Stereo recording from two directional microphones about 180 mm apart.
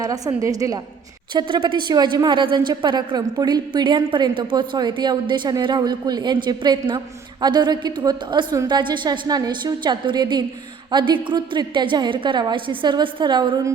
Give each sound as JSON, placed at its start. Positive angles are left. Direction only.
{"t": 0.0, "sound": "a woman's voice", "side_deg": -20}